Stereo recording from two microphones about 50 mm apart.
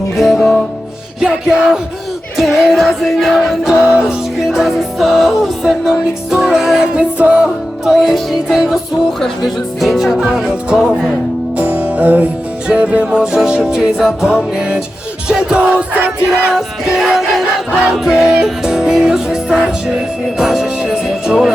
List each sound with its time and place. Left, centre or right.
0.2 s music: centre
6.9 s music: right
7.4 s music: centre
10.4 s music: centre
11.5 s music: right
12.6 s music: right
16.0 s music: right
17.0 s music: centre
18.1 s music: centre